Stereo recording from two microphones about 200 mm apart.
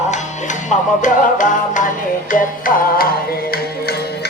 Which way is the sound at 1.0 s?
40° left (ahead or behind).